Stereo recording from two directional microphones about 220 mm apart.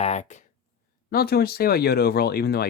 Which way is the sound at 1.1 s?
45° left (ahead or behind).